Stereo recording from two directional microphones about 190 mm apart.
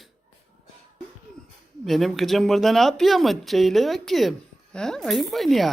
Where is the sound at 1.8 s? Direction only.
Centre (ahead or behind).